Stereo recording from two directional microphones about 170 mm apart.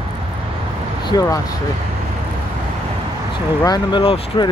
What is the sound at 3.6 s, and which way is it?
Speech, 25° left (ahead or behind).